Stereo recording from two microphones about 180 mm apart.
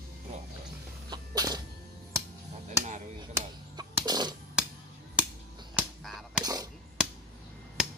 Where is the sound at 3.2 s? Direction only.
20° right (ahead or behind).